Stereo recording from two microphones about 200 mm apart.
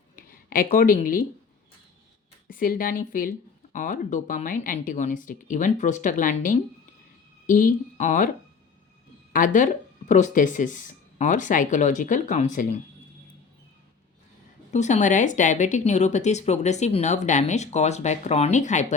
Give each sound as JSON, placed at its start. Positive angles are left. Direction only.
{"t": 0.2, "sound": "speech", "side_deg": 45}
{"t": 2.5, "sound": "speech", "side_deg": 45}
{"t": 9.3, "sound": "speech", "side_deg": 40}
{"t": 14.7, "sound": "speech", "side_deg": 35}